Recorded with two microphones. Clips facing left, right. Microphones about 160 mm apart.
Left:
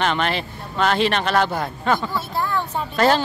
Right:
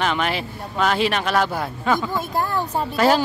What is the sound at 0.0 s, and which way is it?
Speech, 5° right (ahead or behind).